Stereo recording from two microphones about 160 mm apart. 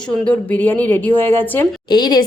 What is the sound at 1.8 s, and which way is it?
Speech, 30° left (ahead or behind).